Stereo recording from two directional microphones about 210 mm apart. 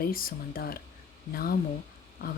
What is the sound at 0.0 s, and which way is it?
Speech, 45° left (ahead or behind).